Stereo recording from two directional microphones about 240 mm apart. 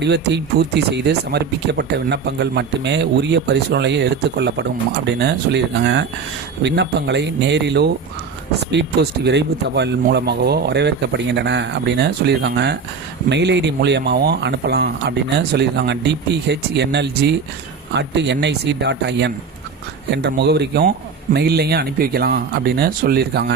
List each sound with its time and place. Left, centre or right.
0.0 s speech: right